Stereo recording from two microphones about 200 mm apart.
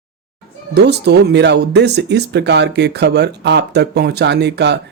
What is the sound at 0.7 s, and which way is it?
Speech, 55° right (ahead or behind).